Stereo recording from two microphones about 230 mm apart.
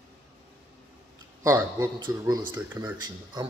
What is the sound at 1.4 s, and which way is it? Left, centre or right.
A man's voice, centre.